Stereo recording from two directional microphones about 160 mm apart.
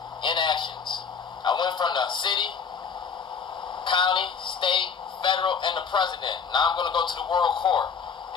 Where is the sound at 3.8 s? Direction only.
30° left (ahead or behind).